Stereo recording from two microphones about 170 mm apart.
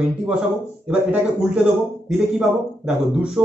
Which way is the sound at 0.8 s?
5° right (ahead or behind).